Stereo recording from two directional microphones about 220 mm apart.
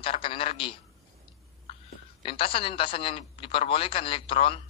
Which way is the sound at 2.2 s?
25° left (ahead or behind).